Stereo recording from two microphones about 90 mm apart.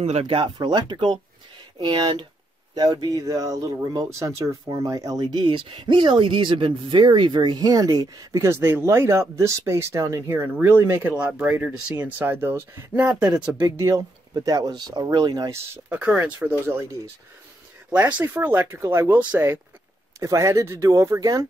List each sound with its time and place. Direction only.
0.2 s speech: 80° right; by 2.2 s 55° right (ahead or behind)
2.7 s speech: 45° right (ahead or behind)
8.5 s speech: 30° right (ahead or behind)
13.1 s speech: 10° right (ahead or behind)
13.7 s speech: 35° right (ahead or behind)
15.9 s speech: 15° right (ahead or behind)
16.6 s speech: 25° right (ahead or behind)